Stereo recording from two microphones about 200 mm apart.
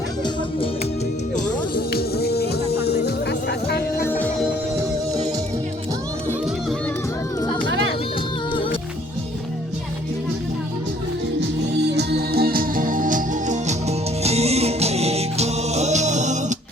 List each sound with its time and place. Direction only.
1.7 s music: 50° left (ahead or behind)
4.0 s music: 5° left (ahead or behind)
11.3 s music: 55° right (ahead or behind); by 16.6 s 35° right (ahead or behind)